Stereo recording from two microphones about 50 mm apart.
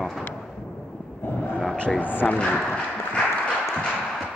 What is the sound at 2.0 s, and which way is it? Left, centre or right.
Speech, left.